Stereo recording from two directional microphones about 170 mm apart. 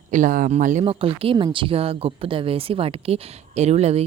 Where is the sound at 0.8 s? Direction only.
35° right (ahead or behind).